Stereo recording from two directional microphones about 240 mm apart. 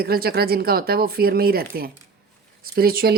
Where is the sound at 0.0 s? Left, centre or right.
Right.